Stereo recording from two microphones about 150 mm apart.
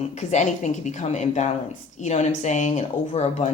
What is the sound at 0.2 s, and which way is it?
Speech, 50° left (ahead or behind).